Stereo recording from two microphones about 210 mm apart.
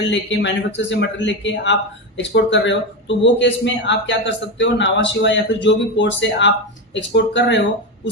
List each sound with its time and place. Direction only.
0.1 s a man's voice: 60° left (ahead or behind)